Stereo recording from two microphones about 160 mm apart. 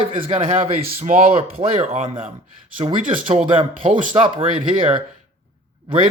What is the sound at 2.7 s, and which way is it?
Speech, 30° right (ahead or behind).